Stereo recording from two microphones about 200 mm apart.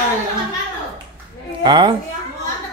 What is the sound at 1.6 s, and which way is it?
Speech, 20° right (ahead or behind).